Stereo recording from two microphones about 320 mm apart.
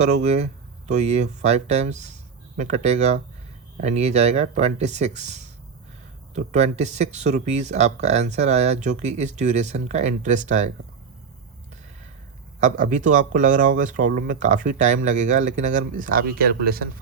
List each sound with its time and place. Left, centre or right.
0.0 s speech: right
12.5 s speech: right